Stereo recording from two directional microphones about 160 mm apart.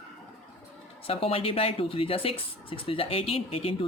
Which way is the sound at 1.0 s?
35° left (ahead or behind).